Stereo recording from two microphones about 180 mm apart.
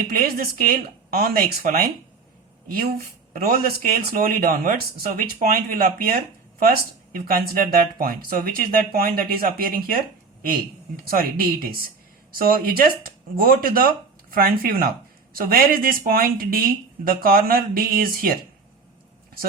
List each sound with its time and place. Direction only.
0.1 s speech: 55° right (ahead or behind)
12.3 s speech: 55° right (ahead or behind)